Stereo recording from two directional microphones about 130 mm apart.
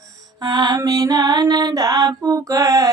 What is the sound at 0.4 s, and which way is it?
Music, 30° right (ahead or behind).